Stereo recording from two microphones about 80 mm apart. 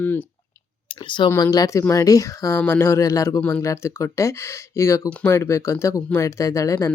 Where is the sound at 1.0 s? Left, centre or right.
Left.